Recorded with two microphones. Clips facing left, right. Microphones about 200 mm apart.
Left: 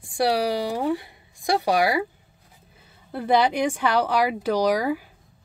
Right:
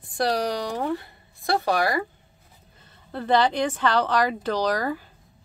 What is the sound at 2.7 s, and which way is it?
A woman's voice, 10° left (ahead or behind).